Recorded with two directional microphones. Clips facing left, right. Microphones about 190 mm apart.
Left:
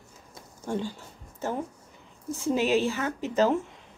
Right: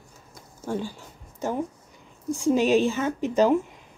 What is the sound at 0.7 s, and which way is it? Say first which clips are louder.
Speech: right 1 dB; 10° right (ahead or behind).